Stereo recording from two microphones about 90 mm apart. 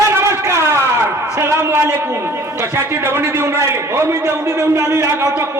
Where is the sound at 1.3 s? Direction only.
30° right (ahead or behind).